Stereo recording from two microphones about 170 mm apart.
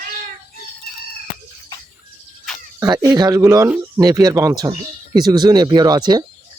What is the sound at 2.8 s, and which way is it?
Speech, 20° right (ahead or behind).